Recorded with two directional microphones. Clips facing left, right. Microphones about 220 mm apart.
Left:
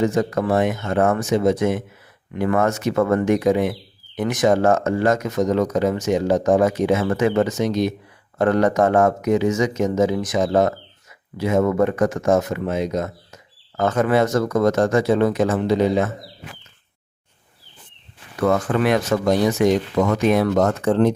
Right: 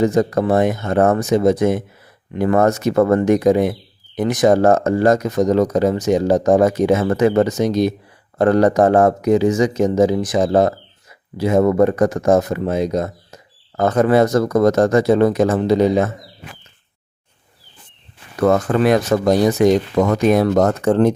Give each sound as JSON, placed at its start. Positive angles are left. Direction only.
{"t": 0.0, "sound": "speech", "side_deg": -35}
{"t": 18.3, "sound": "speech", "side_deg": -40}